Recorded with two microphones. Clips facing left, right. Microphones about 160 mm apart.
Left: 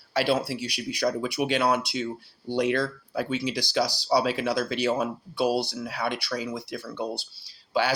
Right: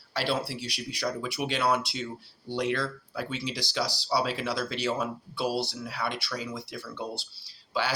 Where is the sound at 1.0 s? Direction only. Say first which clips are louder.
Left 5 dB; 45° left (ahead or behind).